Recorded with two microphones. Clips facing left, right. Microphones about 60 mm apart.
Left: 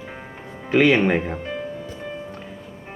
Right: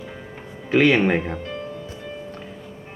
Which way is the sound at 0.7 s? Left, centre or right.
Centre.